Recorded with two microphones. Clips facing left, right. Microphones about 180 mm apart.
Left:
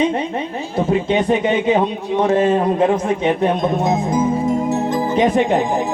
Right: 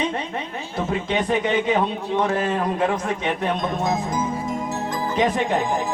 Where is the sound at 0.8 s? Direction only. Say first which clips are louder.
Left 7 dB; 25° left (ahead or behind).